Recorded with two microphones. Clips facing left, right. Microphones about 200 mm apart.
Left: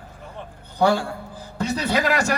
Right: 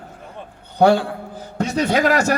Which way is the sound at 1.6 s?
55° right (ahead or behind).